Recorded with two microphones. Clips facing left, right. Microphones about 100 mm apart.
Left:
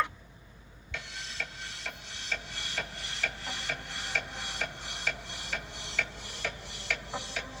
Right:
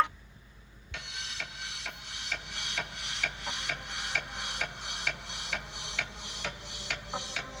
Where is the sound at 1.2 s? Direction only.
90° right.